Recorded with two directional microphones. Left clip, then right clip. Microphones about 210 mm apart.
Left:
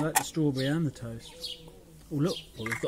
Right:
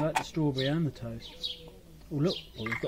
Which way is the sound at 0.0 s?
35° left (ahead or behind).